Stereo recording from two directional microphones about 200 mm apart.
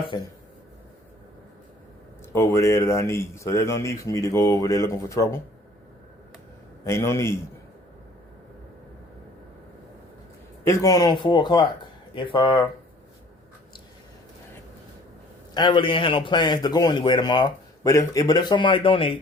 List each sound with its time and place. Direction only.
0.1 s speech: 25° left (ahead or behind)
2.3 s speech: 15° left (ahead or behind)
6.8 s speech: 15° left (ahead or behind)
10.7 s speech: 20° left (ahead or behind)
15.5 s speech: 25° left (ahead or behind)